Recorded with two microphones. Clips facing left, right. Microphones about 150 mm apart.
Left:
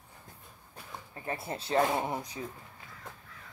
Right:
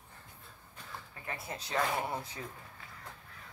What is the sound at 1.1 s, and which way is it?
Speech, 30° left (ahead or behind).